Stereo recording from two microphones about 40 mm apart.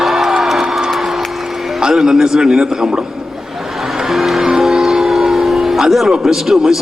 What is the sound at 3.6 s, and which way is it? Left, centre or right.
Music, centre.